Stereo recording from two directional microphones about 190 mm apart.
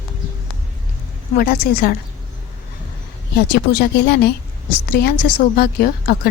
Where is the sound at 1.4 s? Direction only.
50° left (ahead or behind).